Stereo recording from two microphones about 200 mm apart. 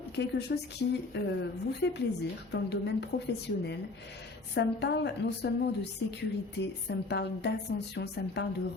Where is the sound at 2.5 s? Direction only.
55° left (ahead or behind).